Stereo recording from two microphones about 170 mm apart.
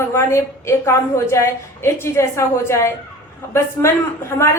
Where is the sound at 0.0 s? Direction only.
15° left (ahead or behind).